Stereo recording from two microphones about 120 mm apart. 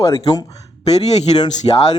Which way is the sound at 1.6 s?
40° left (ahead or behind).